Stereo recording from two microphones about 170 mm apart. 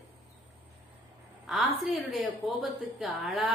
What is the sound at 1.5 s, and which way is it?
A woman's voice, centre (ahead or behind).